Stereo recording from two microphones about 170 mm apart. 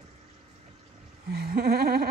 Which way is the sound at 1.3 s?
65° right (ahead or behind).